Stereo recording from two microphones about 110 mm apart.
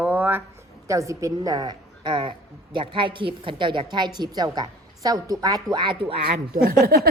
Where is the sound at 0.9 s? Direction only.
30° right (ahead or behind); by 6.2 s 50° right (ahead or behind).